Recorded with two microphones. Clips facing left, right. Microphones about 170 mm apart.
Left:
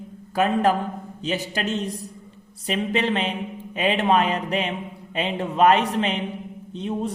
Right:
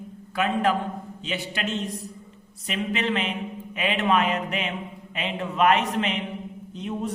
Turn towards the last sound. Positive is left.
turn(degrees=30)  # may be behind; listen again after turning